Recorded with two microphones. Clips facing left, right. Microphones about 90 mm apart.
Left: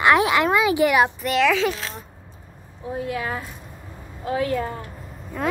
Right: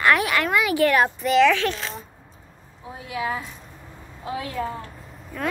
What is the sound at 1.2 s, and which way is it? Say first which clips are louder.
Speech: right 2 dB; centre (ahead or behind).